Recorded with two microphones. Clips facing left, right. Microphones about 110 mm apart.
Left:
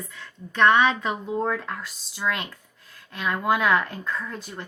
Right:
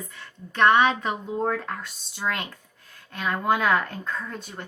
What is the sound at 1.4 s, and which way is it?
Speech, 40° right (ahead or behind).